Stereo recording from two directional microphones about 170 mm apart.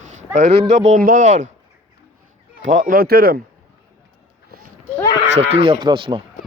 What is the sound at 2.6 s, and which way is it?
Speech, 55° right (ahead or behind).